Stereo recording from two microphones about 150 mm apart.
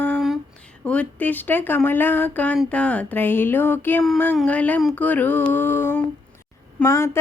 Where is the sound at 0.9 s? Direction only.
10° left (ahead or behind).